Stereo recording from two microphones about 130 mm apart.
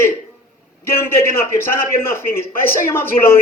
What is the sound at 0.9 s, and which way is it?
A man's voice, 20° left (ahead or behind).